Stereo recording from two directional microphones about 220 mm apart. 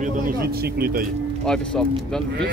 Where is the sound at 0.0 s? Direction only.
40° right (ahead or behind).